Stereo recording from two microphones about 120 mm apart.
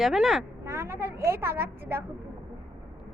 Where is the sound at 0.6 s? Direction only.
20° right (ahead or behind).